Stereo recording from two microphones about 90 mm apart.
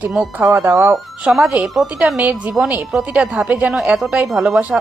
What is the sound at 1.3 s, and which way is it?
Speech, 5° right (ahead or behind).